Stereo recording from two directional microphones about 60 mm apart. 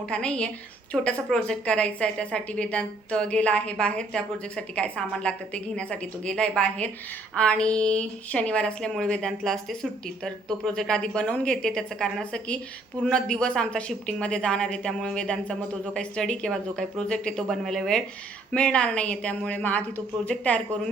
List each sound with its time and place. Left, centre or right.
0.1 s a woman's voice: centre
10.8 s a woman's voice: centre
17.5 s a woman's voice: centre
18.5 s speech: centre